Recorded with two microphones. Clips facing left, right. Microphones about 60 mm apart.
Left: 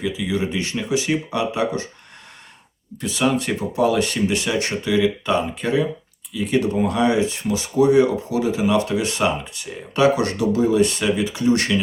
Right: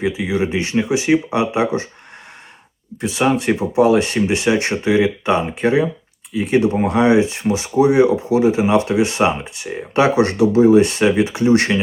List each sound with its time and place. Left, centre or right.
0.0 s speech: right
3.0 s speech: right